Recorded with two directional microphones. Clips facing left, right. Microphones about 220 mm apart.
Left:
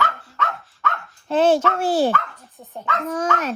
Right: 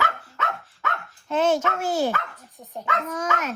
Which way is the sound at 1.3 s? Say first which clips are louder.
Left 5 dB; 30° left (ahead or behind).